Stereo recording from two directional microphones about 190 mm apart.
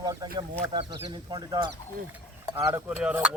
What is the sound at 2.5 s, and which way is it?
Speech, 10° right (ahead or behind).